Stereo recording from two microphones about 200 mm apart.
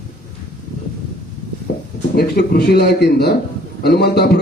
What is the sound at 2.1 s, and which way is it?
A man's voice, 55° left (ahead or behind).